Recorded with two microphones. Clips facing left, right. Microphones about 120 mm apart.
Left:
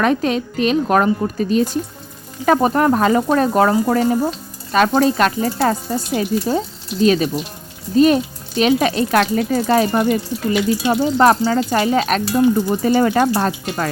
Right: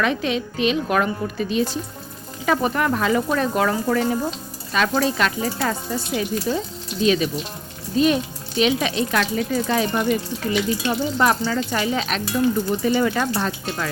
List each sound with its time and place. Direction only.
0.0 s speech: 45° left (ahead or behind)